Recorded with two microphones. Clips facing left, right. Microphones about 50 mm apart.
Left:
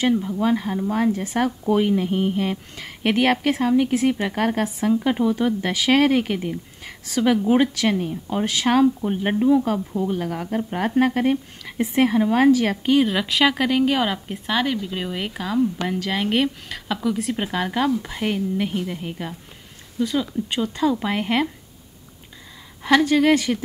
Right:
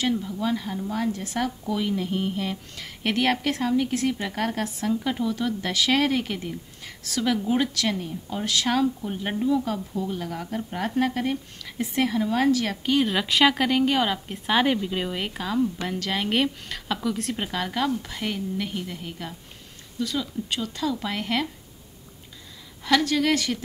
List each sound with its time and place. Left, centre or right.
0.0 s speech: left
1.7 s speech: left
2.0 s speech: left
13.0 s speech: centre; by 21.5 s left
22.8 s speech: left